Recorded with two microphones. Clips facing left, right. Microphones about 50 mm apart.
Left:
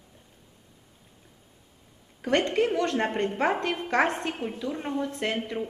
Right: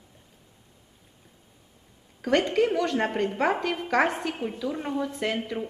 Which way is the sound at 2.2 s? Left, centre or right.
Left.